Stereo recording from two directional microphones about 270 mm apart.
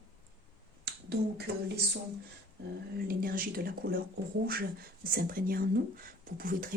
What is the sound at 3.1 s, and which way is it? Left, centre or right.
Speech, right.